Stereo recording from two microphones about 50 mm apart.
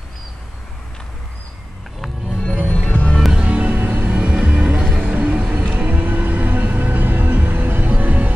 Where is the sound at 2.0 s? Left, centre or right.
Centre.